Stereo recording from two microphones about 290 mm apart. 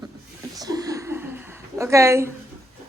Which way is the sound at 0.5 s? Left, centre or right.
Centre.